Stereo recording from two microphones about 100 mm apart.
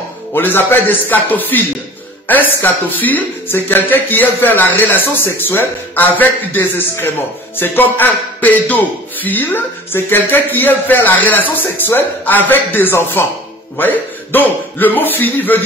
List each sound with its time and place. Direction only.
0.3 s speech: 20° left (ahead or behind)